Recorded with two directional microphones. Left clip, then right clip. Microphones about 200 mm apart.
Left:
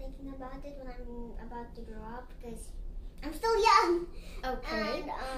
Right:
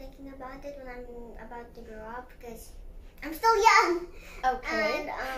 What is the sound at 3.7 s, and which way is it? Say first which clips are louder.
A child's voice: even; 5° right (ahead or behind).